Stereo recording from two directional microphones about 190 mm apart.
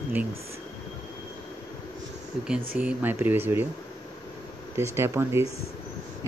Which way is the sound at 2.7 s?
10° right (ahead or behind).